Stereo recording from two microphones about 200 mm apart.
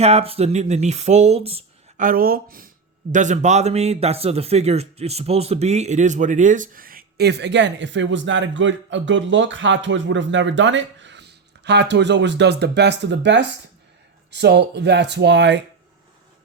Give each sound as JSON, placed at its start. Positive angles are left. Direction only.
{"t": 0.0, "sound": "speech", "side_deg": -30}
{"t": 2.0, "sound": "a man's voice", "side_deg": -45}